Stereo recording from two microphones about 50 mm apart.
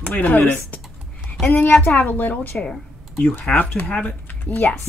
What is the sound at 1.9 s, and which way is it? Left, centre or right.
A woman's voice, left.